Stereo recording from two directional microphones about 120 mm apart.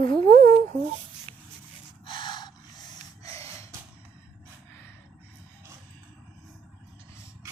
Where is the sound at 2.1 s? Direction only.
40° left (ahead or behind).